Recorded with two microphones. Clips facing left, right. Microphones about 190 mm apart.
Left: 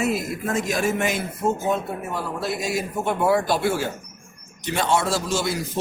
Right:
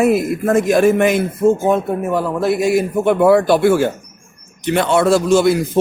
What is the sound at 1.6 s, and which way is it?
Speech, 50° right (ahead or behind).